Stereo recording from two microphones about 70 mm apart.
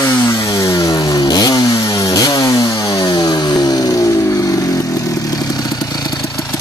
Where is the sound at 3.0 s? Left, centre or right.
Left.